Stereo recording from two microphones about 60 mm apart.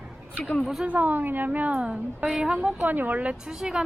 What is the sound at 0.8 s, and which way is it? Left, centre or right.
A woman's voice, right.